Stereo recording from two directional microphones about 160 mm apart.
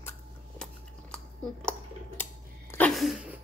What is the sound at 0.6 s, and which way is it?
Dishes, 5° left (ahead or behind).